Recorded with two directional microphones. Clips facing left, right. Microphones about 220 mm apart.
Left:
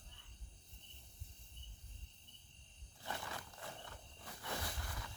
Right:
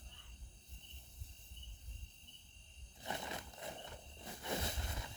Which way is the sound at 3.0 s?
20° right (ahead or behind).